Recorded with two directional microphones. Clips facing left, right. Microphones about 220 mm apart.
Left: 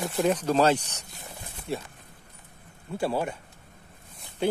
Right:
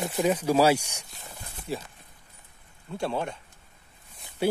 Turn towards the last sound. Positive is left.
turn(degrees=5)  # may be behind; listen again after turning